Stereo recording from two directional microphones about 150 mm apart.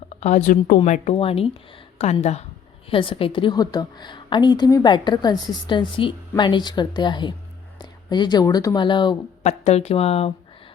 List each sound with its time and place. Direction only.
0.1 s a woman's voice: 50° left (ahead or behind)
0.9 s a woman's voice: 45° left (ahead or behind)
2.9 s a woman's voice: 35° left (ahead or behind)
9.4 s speech: 50° left (ahead or behind)